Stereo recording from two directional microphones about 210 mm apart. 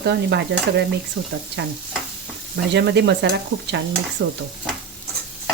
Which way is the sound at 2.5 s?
55° right (ahead or behind).